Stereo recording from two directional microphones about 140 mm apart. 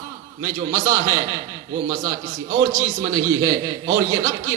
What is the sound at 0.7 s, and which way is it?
Speech, 25° right (ahead or behind).